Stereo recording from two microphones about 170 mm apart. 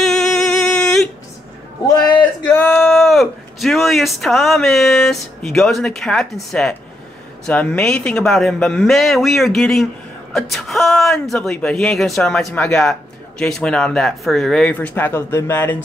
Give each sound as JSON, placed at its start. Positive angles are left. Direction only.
{"t": 0.0, "sound": "singing", "side_deg": 0}
{"t": 1.9, "sound": "a sound", "side_deg": 25}
{"t": 2.5, "sound": "a man's voice", "side_deg": 5}